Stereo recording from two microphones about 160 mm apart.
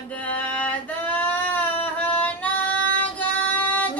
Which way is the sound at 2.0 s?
10° left (ahead or behind).